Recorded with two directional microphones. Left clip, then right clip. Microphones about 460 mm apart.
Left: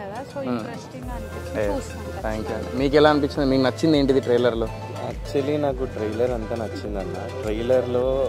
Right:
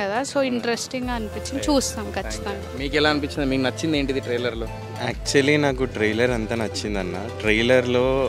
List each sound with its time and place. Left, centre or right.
0.0 s speech: right
2.8 s speech: centre
3.3 s speech: centre
3.8 s speech: centre
5.0 s speech: right
7.4 s speech: right